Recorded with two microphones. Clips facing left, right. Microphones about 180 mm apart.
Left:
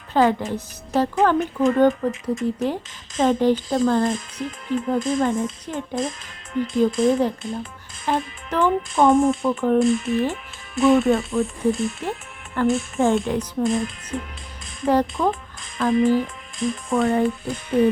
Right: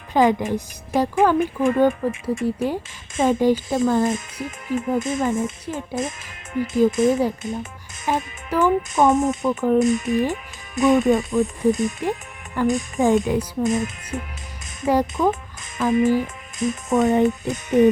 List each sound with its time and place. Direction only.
0.1 s a woman's voice: 15° right (ahead or behind)
9.1 s speech: 20° right (ahead or behind)
9.5 s speech: 5° right (ahead or behind)
9.8 s a woman's voice: 15° right (ahead or behind)
10.8 s speech: centre (ahead or behind)
11.1 s a woman's voice: 15° right (ahead or behind)
13.2 s speech: 5° right (ahead or behind)
16.9 s speech: 20° right (ahead or behind)